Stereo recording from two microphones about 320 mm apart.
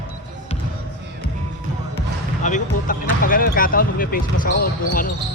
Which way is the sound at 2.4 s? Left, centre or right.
Left.